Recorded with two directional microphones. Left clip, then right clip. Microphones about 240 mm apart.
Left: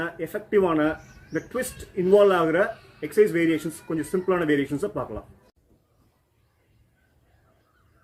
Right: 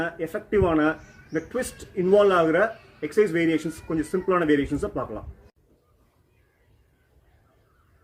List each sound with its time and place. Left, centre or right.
0.0 s speech: centre